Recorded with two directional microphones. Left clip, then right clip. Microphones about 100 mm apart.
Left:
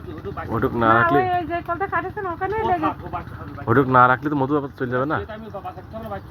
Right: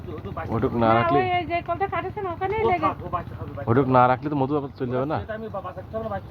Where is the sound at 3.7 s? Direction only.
20° right (ahead or behind).